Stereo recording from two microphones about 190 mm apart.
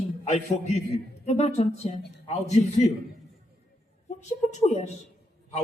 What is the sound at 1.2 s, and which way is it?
Speech, 35° left (ahead or behind).